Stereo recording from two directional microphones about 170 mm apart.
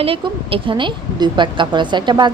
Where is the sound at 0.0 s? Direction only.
35° right (ahead or behind).